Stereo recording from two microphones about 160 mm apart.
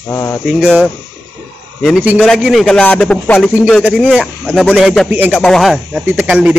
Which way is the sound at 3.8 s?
5° right (ahead or behind).